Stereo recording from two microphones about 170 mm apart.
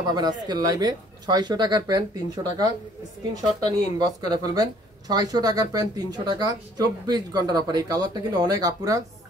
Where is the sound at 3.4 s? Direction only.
25° right (ahead or behind).